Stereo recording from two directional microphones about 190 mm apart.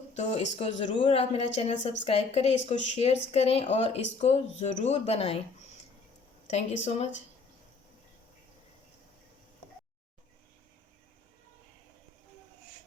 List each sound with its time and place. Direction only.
0.1 s speech: 35° left (ahead or behind)
6.5 s speech: 35° left (ahead or behind)